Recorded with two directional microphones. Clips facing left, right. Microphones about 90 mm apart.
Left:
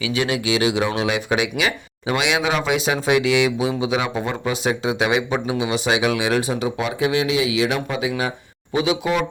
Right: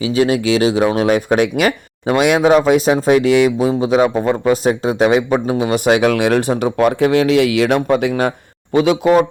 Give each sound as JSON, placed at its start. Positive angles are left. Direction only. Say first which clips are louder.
{"t": 0.0, "sound": "speech", "louder": "right 7 dB", "side_deg": -35}